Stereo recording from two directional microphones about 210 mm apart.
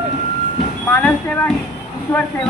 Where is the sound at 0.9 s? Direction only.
10° left (ahead or behind).